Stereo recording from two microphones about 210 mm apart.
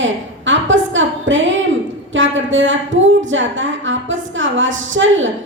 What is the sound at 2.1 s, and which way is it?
A woman's voice, 65° right (ahead or behind).